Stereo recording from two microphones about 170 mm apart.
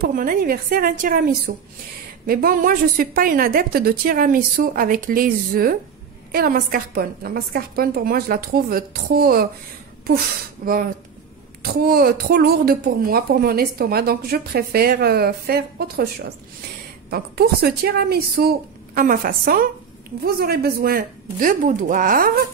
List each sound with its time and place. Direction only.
0.0 s a woman's voice: 55° right (ahead or behind)
18.9 s a woman's voice: 55° right (ahead or behind)